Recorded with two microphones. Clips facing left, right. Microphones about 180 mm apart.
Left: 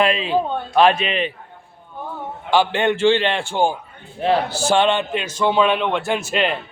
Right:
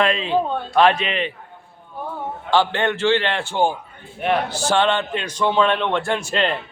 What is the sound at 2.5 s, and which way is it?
A man's voice, 10° left (ahead or behind).